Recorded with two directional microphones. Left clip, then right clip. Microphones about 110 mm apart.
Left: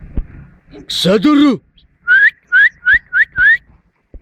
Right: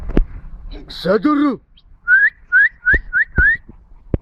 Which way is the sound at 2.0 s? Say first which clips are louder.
Left 3 dB; 60° left (ahead or behind).